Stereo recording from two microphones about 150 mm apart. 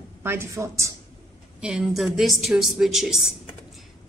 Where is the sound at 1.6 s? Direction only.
5° right (ahead or behind).